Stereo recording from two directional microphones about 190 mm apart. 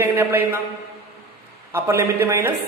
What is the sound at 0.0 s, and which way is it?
Speech, 10° right (ahead or behind).